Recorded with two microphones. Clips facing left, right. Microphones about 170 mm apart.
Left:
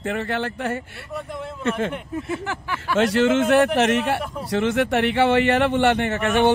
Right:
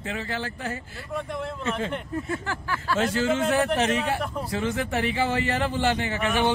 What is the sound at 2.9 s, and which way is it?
A man's voice, 70° left (ahead or behind).